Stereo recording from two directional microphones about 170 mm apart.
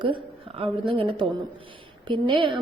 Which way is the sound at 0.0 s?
30° right (ahead or behind).